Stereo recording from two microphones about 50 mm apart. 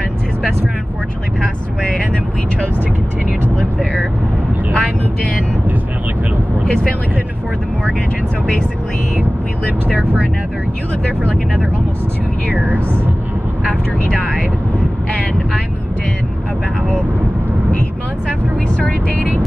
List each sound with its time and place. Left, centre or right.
1.8 s vehicle: left
4.7 s vehicle: left
12.5 s speech: right
18.8 s vehicle: left